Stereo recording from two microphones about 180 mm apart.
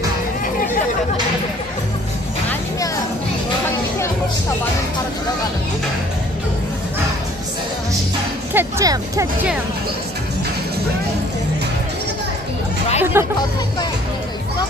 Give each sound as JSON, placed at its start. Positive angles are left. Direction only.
{"t": 8.5, "sound": "speech", "side_deg": -20}
{"t": 13.0, "sound": "music", "side_deg": -15}